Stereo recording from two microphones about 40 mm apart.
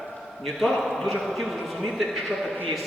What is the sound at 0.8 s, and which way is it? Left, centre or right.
A man's voice, centre.